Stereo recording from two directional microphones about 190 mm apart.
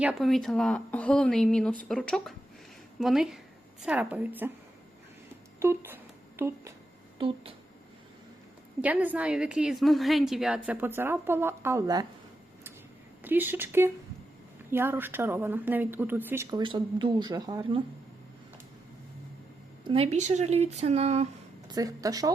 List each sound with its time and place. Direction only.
0.0 s a woman's voice: centre (ahead or behind)
5.5 s a sound: 10° right (ahead or behind)
7.2 s speech: 30° right (ahead or behind)
8.8 s a woman's voice: 10° right (ahead or behind)
13.2 s a woman's voice: 10° right (ahead or behind); by 17.8 s 25° right (ahead or behind)
19.9 s speech: 35° right (ahead or behind)
21.7 s speech: 20° right (ahead or behind)